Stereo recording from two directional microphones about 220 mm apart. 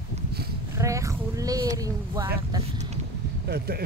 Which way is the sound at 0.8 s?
15° right (ahead or behind).